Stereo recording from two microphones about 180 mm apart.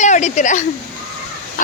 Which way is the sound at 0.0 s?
40° left (ahead or behind).